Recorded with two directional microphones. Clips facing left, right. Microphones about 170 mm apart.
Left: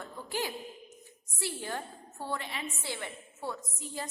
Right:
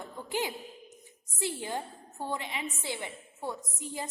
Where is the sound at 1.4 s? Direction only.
15° right (ahead or behind).